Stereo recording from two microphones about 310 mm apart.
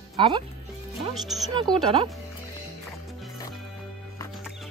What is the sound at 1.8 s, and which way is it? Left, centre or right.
Speech, centre.